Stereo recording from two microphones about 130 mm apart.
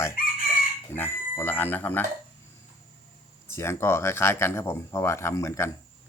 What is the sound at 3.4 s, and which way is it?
Speech, 20° left (ahead or behind).